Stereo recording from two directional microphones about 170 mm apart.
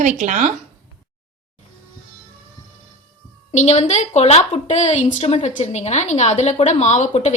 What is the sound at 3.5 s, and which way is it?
A woman's voice, 40° left (ahead or behind).